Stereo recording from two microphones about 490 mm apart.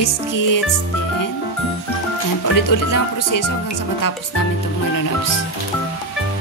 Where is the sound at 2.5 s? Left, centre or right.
Left.